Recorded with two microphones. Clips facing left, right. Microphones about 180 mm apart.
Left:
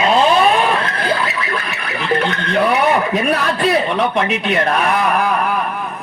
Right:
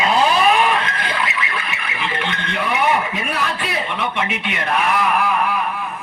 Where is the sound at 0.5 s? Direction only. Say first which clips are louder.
Left 2 dB; 35° left (ahead or behind).